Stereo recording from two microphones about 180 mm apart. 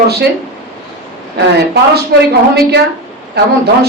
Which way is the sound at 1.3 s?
65° right (ahead or behind).